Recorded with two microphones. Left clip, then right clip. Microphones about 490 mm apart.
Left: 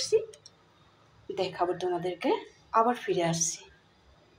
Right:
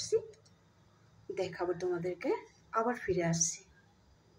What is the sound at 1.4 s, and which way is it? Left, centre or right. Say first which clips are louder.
A woman's voice: left 6 dB; right.